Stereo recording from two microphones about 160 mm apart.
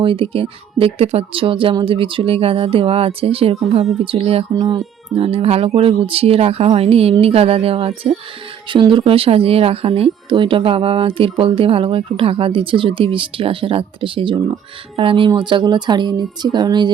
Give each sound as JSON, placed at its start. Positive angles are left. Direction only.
{"t": 0.0, "sound": "speech", "side_deg": -35}